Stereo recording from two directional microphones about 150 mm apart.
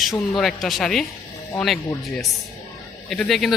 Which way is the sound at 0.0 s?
Centre (ahead or behind).